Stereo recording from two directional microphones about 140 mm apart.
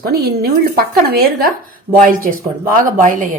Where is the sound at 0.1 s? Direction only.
90° right.